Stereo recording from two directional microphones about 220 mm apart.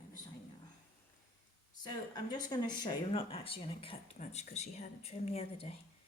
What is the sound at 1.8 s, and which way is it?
Speech, 20° left (ahead or behind).